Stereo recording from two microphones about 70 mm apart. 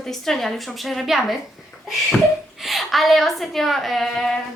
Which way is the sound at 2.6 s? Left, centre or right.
Centre.